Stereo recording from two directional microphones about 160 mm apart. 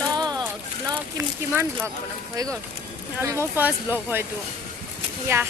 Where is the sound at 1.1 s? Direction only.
15° right (ahead or behind).